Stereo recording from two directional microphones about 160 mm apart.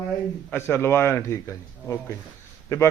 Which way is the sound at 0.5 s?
15° left (ahead or behind).